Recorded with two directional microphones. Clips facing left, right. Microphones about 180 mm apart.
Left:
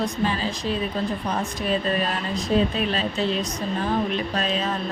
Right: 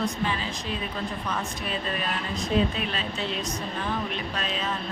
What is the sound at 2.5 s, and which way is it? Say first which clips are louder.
Speech: left 3 dB; 35° left (ahead or behind).